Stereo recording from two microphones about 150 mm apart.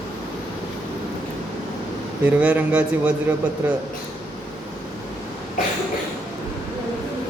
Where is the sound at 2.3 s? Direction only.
10° right (ahead or behind).